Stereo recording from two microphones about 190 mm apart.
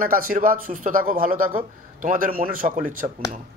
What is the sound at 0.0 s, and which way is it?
Speech, 50° right (ahead or behind).